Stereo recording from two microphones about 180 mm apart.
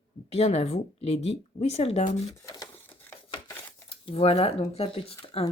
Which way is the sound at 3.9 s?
30° left (ahead or behind).